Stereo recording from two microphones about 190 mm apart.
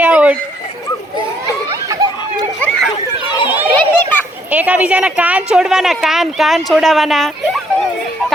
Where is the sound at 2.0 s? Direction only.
20° right (ahead or behind).